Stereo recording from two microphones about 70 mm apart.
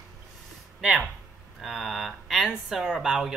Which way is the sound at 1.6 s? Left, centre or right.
Centre.